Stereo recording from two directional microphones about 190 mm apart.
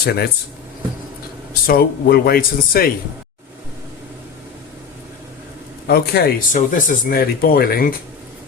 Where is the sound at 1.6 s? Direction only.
50° left (ahead or behind).